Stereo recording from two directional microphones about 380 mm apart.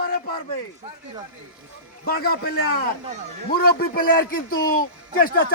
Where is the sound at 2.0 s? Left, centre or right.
Left.